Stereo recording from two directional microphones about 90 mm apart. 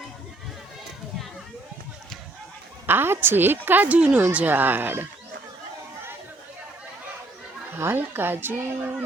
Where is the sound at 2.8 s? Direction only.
25° right (ahead or behind).